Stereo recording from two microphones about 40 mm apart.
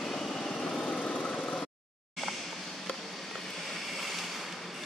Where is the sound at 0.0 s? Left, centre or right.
Centre.